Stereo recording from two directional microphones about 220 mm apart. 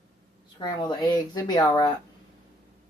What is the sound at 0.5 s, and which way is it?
Speech, 20° left (ahead or behind).